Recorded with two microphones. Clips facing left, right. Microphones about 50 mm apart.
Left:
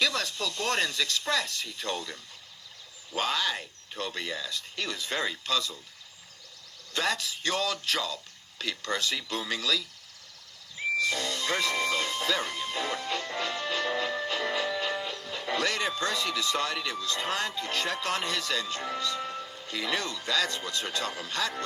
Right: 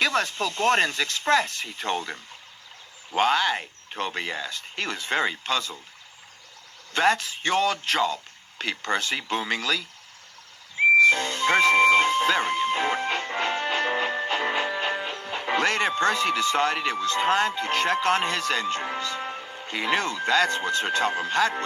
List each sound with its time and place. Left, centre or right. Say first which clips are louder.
0.0 s a man's voice: right 5 dB; right
6.9 s a man's voice: right 8 dB; right